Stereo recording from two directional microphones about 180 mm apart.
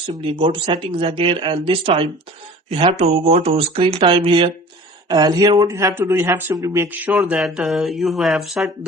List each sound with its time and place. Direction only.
0.1 s speech: 30° right (ahead or behind); by 8.7 s centre (ahead or behind)